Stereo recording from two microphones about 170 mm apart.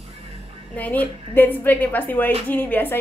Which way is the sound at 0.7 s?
10° left (ahead or behind).